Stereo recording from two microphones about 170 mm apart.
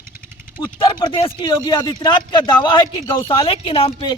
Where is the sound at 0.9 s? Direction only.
30° left (ahead or behind).